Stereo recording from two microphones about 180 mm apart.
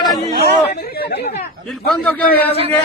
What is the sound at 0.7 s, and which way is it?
Speech, 60° left (ahead or behind).